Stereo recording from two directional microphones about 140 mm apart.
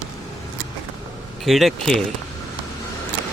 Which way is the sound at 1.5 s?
Centre (ahead or behind).